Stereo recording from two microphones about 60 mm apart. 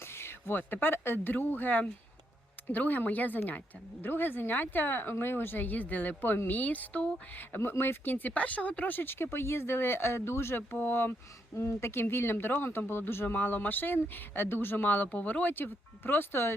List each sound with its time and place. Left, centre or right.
0.0 s speech: left
11.5 s speech: left